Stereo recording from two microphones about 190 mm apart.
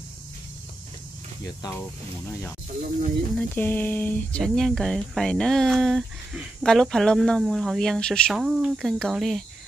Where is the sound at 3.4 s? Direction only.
10° left (ahead or behind).